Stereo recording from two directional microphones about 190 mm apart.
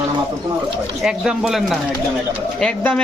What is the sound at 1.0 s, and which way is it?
A man's voice, 5° right (ahead or behind).